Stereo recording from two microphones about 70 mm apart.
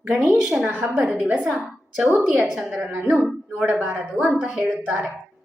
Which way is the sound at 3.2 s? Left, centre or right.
Centre.